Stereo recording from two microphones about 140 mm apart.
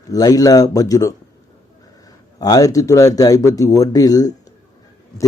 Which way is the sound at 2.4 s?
25° left (ahead or behind).